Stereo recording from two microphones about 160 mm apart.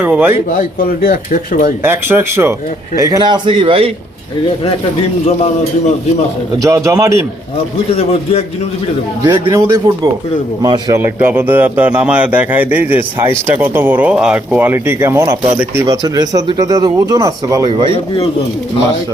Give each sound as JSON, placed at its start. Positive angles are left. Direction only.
{"t": 0.0, "sound": "speech", "side_deg": -10}
{"t": 0.5, "sound": "speech", "side_deg": 70}
{"t": 1.8, "sound": "speech", "side_deg": -15}
{"t": 6.6, "sound": "speech", "side_deg": -20}
{"t": 7.9, "sound": "a man's voice", "side_deg": 40}
{"t": 9.5, "sound": "speech", "side_deg": -20}